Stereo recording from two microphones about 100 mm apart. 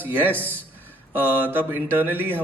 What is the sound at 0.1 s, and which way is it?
A man's voice, 20° right (ahead or behind).